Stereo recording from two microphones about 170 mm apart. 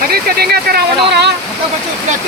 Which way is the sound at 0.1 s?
65° right (ahead or behind).